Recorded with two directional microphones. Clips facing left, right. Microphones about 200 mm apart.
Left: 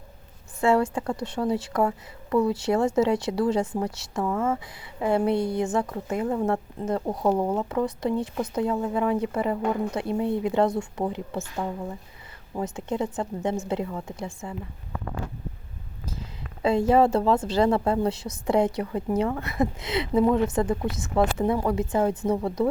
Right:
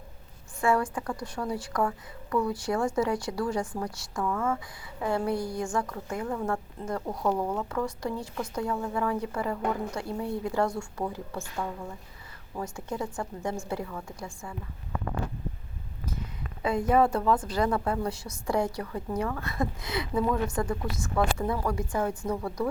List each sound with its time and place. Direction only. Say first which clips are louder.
0.6 s a woman's voice: left 5 dB; 25° left (ahead or behind)
16.6 s a woman's voice: left 4 dB; 25° left (ahead or behind)